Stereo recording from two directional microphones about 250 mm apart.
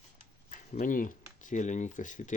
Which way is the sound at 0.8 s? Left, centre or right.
Left.